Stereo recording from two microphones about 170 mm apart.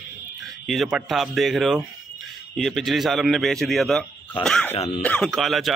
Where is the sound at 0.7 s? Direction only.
Centre (ahead or behind).